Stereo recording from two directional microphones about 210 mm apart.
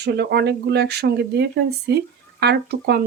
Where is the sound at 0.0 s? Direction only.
50° right (ahead or behind).